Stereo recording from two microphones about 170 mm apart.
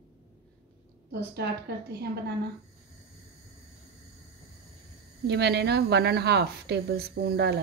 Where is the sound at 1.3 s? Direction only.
70° right (ahead or behind).